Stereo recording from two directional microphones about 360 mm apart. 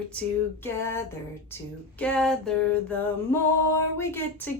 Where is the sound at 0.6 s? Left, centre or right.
Centre.